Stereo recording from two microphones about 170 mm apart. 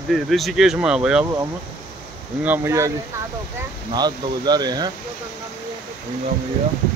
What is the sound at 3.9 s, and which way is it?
Speech, 25° right (ahead or behind).